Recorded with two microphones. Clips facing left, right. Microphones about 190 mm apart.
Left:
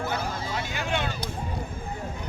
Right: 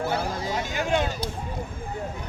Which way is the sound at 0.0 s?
35° right (ahead or behind).